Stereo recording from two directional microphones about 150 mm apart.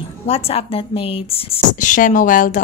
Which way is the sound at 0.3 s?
40° left (ahead or behind).